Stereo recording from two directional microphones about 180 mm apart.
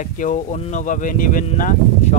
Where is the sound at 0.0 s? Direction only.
45° left (ahead or behind).